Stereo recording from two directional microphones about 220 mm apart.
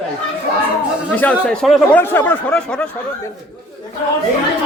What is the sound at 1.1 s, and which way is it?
Speech, 5° left (ahead or behind).